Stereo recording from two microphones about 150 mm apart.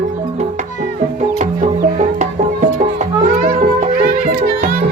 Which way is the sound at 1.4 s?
55° right (ahead or behind).